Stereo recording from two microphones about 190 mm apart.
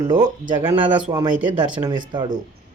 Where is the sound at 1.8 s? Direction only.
25° right (ahead or behind).